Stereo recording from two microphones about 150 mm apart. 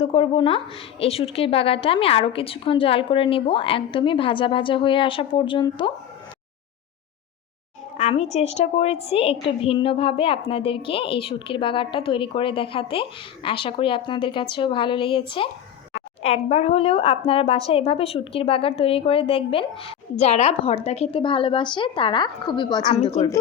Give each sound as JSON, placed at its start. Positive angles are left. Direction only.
{"t": 0.0, "sound": "a woman's voice", "side_deg": 40}
{"t": 8.1, "sound": "a woman's voice", "side_deg": 45}
{"t": 16.0, "sound": "a woman's voice", "side_deg": 45}